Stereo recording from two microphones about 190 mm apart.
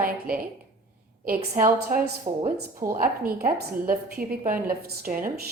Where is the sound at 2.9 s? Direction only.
50° right (ahead or behind).